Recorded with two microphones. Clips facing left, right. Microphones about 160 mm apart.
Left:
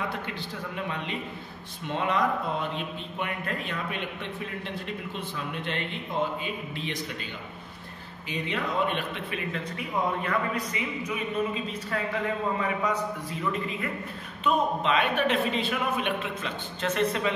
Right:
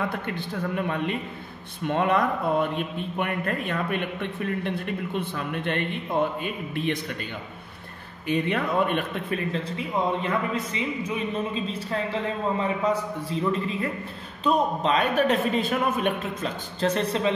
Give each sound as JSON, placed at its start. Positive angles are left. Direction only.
{"t": 0.3, "sound": "a man's voice", "side_deg": -55}
{"t": 8.3, "sound": "speech", "side_deg": -55}
{"t": 9.5, "sound": "a man's voice", "side_deg": -25}